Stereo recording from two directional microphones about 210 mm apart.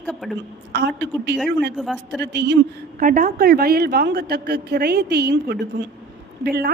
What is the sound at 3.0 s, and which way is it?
A woman's voice, 40° right (ahead or behind).